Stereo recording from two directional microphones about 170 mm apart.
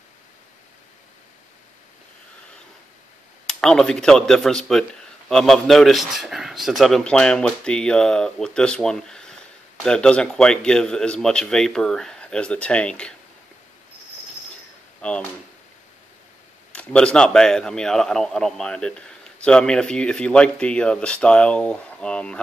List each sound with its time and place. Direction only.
3.4 s a man's voice: 5° left (ahead or behind)
15.0 s speech: 5° left (ahead or behind)
16.7 s a man's voice: 5° left (ahead or behind)